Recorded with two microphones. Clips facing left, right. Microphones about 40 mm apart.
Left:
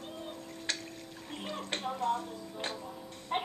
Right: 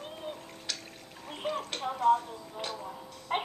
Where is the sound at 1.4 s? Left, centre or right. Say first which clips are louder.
Right 7 dB; right.